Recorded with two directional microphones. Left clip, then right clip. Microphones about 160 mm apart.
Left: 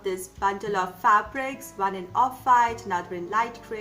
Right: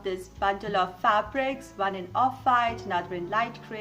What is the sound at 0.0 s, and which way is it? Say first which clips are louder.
A woman's voice: left 1 dB; 20° right (ahead or behind).